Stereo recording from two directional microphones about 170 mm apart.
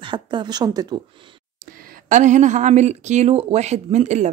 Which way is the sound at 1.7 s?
50° right (ahead or behind).